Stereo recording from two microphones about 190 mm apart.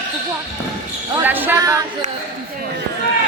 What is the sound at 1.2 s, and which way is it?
Speech, 10° right (ahead or behind).